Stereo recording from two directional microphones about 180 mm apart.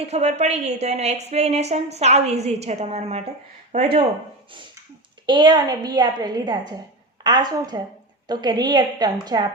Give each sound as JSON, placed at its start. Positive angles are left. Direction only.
{"t": 0.0, "sound": "a woman's voice", "side_deg": -35}
{"t": 5.2, "sound": "a woman's voice", "side_deg": -25}